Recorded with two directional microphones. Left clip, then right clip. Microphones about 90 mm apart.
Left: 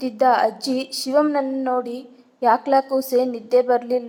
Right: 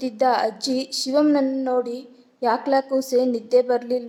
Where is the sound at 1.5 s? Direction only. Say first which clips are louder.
Left 1 dB; 10° right (ahead or behind).